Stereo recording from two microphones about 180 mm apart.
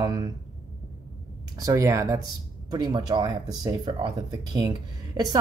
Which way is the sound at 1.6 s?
20° right (ahead or behind).